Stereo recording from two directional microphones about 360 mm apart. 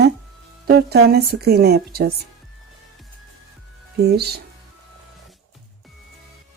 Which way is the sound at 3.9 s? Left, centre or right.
Right.